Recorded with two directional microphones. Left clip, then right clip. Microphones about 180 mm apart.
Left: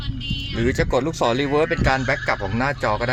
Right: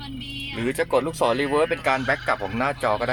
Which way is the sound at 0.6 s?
10° left (ahead or behind).